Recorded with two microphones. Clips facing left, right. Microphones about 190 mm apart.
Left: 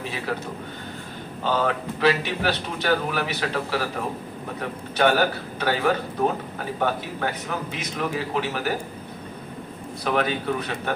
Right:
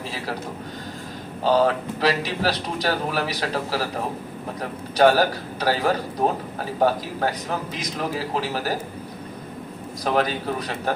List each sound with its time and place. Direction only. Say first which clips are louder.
1.5 s speech: right 5 dB; 35° right (ahead or behind)
10.0 s speech: right 1 dB; 40° right (ahead or behind)